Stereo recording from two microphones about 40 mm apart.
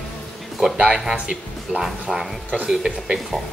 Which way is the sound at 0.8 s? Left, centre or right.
Right.